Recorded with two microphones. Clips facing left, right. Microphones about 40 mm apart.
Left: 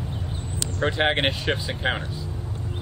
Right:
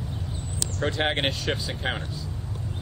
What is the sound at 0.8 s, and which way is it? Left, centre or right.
Speech, centre.